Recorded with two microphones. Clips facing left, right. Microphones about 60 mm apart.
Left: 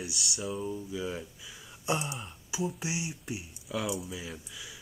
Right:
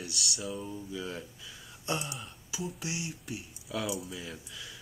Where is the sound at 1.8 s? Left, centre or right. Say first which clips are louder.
Left 3 dB; centre.